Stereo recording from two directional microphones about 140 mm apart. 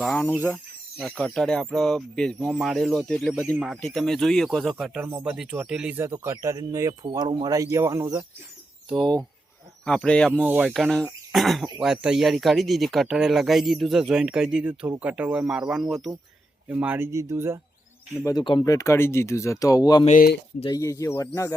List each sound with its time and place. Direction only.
0.0 s speech: 5° left (ahead or behind)
0.3 s speech: 15° left (ahead or behind)
0.5 s speech: 5° left (ahead or behind)
4.9 s speech: 15° right (ahead or behind)
8.9 s speech: centre (ahead or behind)
10.3 s speech: 10° right (ahead or behind)
10.7 s speech: 5° left (ahead or behind)
16.6 s speech: 10° right (ahead or behind)
18.3 s speech: 35° left (ahead or behind)
18.6 s speech: 25° left (ahead or behind)
20.1 s speech: 75° left (ahead or behind)
20.7 s speech: 25° left (ahead or behind)